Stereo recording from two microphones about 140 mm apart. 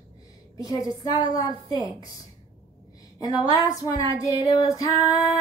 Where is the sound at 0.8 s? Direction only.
30° left (ahead or behind).